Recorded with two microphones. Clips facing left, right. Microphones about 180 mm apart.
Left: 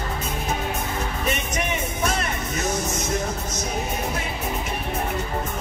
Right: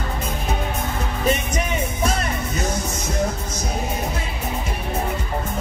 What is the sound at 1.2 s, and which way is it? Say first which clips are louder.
Music: right 6 dB; 30° right (ahead or behind).